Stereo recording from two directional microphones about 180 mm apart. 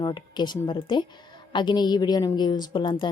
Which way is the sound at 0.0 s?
25° left (ahead or behind).